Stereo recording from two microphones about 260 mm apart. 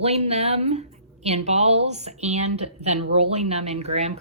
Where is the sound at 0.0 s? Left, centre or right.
Right.